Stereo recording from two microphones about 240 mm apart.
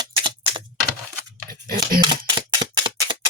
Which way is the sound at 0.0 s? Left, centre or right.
Centre.